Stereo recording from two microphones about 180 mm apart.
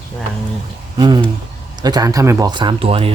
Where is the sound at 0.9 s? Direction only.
25° right (ahead or behind).